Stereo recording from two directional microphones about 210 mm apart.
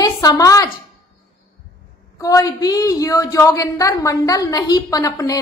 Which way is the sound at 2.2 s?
15° left (ahead or behind).